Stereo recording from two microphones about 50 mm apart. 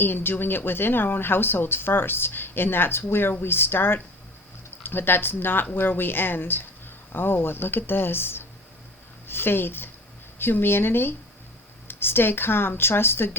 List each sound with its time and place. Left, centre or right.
0.0 s a woman's voice: left